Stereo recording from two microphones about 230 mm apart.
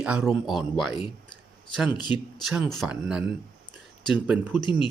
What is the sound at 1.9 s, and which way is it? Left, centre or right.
Speech, centre.